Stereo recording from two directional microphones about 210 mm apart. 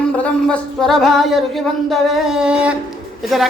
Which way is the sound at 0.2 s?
5° left (ahead or behind).